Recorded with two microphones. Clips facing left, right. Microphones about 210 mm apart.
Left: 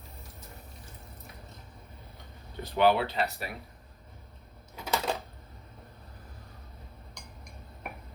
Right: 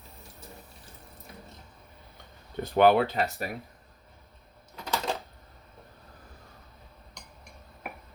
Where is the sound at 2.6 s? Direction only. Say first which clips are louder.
Right 4 dB; 50° right (ahead or behind).